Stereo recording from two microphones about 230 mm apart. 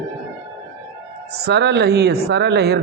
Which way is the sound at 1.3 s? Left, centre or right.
Right.